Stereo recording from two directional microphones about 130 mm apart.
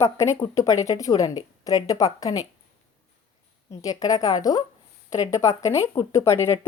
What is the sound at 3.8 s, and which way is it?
A woman's voice, 30° left (ahead or behind).